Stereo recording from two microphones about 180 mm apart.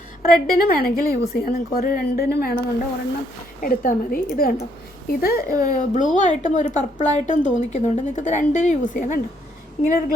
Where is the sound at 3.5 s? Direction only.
50° left (ahead or behind).